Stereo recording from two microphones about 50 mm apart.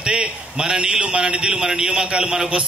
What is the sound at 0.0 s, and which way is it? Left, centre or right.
A man's voice, centre.